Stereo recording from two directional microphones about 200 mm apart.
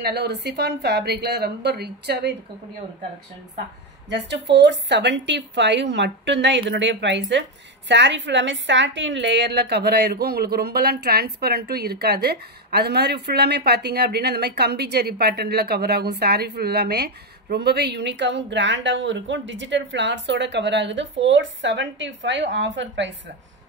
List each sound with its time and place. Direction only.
0.0 s a woman's voice: 55° right (ahead or behind)
4.1 s a woman's voice: 60° right (ahead or behind)